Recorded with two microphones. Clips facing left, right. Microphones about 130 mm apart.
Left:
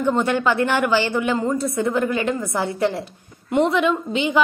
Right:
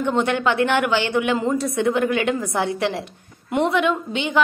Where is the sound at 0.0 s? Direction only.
5° left (ahead or behind).